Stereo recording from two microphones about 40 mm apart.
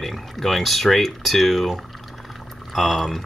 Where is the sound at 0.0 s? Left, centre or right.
Centre.